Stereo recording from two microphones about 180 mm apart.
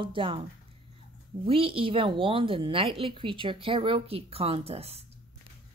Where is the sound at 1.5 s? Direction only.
30° right (ahead or behind).